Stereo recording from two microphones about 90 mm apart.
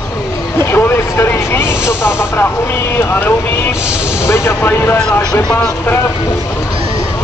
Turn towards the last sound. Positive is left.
turn(degrees=30)  # may be behind; listen again after turning